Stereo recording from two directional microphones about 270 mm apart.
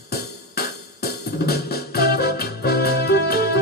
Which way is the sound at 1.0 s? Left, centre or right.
Left.